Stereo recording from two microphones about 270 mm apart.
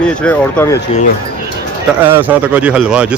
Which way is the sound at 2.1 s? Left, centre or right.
Centre.